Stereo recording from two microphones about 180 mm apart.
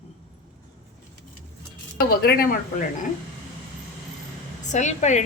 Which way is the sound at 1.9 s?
60° left (ahead or behind).